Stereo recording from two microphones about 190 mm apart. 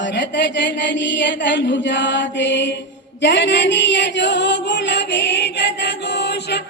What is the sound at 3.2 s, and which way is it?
Chant, 65° left (ahead or behind).